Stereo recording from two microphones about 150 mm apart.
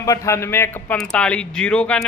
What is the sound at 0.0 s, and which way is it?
A man's voice, 20° left (ahead or behind).